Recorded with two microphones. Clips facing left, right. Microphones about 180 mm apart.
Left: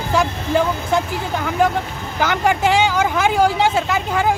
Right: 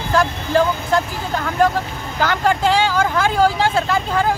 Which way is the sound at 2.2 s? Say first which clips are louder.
Even; 15° left (ahead or behind).